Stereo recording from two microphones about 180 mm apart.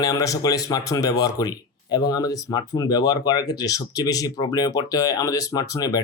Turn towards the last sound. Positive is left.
turn(degrees=20)  # may be behind; listen again after turning